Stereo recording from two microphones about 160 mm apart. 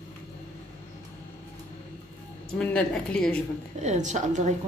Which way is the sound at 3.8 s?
50° right (ahead or behind).